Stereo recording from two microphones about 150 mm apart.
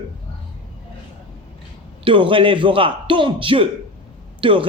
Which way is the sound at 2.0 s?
35° right (ahead or behind).